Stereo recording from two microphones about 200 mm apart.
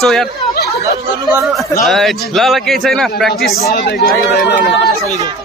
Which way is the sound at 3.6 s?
55° left (ahead or behind).